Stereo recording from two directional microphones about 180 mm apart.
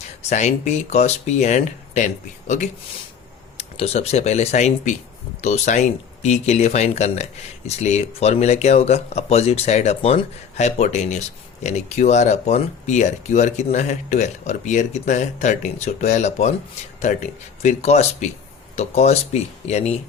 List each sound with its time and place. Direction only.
0.2 s speech: 40° left (ahead or behind)
3.6 s speech: 35° left (ahead or behind)